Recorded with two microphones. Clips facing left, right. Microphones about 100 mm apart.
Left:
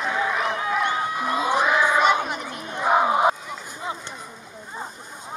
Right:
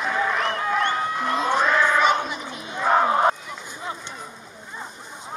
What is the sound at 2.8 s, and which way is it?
Crowd, 10° left (ahead or behind).